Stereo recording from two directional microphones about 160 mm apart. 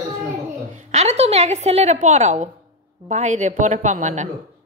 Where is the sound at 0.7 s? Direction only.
45° right (ahead or behind).